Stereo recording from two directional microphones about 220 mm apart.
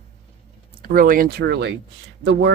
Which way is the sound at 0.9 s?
40° right (ahead or behind).